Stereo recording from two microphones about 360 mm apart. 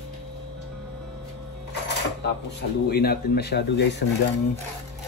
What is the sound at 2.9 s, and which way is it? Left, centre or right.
A man's voice, left.